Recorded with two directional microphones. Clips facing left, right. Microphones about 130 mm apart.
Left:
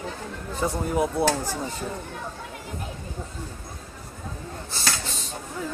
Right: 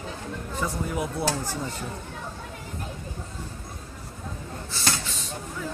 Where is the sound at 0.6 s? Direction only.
30° left (ahead or behind).